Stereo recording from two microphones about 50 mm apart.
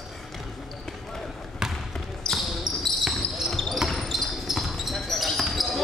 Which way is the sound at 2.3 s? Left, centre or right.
Centre.